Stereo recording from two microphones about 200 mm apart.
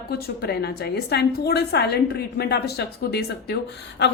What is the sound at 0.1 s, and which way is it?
A woman's voice, 55° left (ahead or behind).